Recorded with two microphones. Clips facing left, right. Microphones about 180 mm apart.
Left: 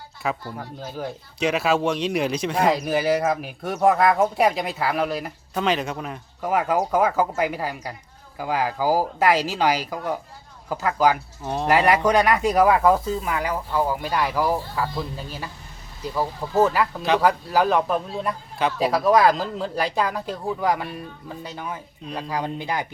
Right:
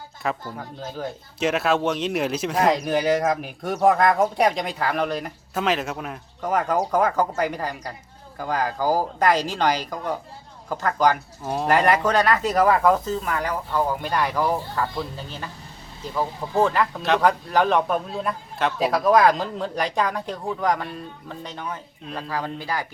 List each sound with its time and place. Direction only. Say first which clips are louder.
0.2 s speech: even; centre (ahead or behind)
22.3 s speech: left 1 dB; 15° left (ahead or behind)